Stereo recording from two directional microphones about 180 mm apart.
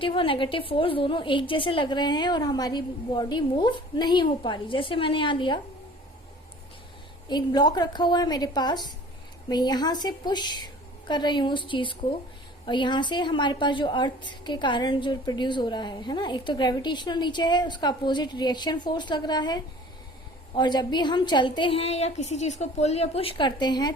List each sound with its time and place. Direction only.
0.0 s a woman's voice: 30° left (ahead or behind)
7.3 s a woman's voice: 25° left (ahead or behind)